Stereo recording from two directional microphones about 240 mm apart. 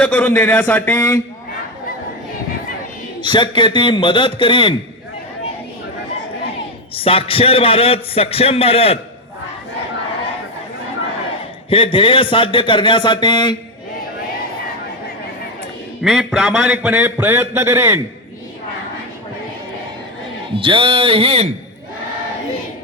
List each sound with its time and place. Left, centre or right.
0.0 s a man's voice: centre
3.2 s a man's voice: centre
6.9 s a man's voice: left
11.7 s a man's voice: left
16.0 s a man's voice: centre
20.6 s speech: right